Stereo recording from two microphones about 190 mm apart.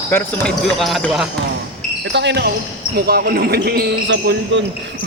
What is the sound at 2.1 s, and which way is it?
Speech, 65° right (ahead or behind).